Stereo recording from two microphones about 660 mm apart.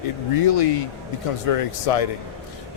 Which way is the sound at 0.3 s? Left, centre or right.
Left.